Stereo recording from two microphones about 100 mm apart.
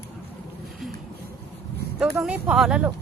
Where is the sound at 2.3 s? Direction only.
5° right (ahead or behind).